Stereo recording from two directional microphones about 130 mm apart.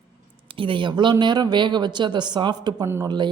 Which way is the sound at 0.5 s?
40° right (ahead or behind).